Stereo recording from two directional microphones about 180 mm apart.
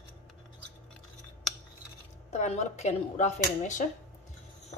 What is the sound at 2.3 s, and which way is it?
Speech, 40° left (ahead or behind).